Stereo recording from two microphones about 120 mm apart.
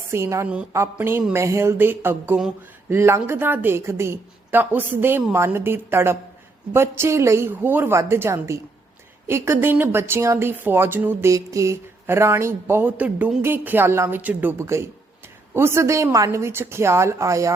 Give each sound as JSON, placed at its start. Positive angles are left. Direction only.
{"t": 0.1, "sound": "a woman's voice", "side_deg": -25}
{"t": 0.4, "sound": "a woman's voice", "side_deg": -10}
{"t": 0.7, "sound": "a woman's voice", "side_deg": -20}